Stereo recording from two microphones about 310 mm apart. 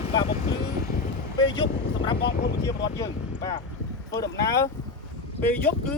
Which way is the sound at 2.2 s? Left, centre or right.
Left.